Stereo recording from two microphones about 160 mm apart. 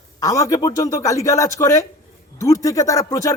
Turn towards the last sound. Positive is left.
turn(degrees=20)  # may be behind; listen again after turning